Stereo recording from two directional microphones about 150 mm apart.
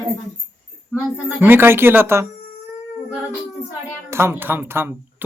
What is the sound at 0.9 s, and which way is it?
Speech, 15° right (ahead or behind).